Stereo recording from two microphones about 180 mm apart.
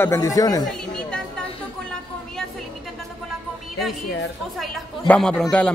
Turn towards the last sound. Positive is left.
turn(degrees=5)  # may be behind; listen again after turning